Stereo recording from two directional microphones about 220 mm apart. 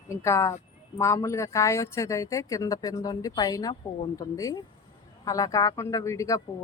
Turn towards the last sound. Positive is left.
turn(degrees=15)  # may be behind; listen again after turning